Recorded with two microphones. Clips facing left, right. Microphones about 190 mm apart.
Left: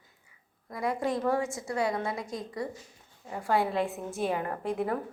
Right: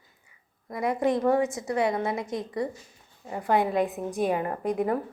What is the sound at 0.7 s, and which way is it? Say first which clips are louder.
A woman's voice: right 5 dB; 20° right (ahead or behind).